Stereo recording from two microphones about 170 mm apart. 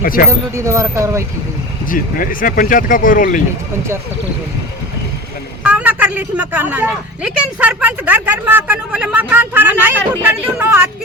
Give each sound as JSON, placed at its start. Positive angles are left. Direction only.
{"t": 0.0, "sound": "speech", "side_deg": 60}
{"t": 0.3, "sound": "a woman's voice", "side_deg": -15}
{"t": 1.9, "sound": "speech", "side_deg": 55}
{"t": 5.6, "sound": "a woman's voice", "side_deg": -10}